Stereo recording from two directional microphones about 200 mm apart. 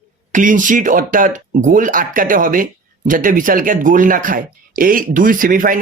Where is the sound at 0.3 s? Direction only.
40° right (ahead or behind).